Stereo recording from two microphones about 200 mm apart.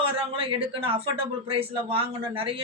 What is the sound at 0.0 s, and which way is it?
Speech, 30° right (ahead or behind).